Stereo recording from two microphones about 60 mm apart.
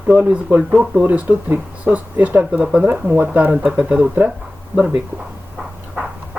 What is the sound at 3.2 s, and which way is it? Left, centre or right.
Speech, right.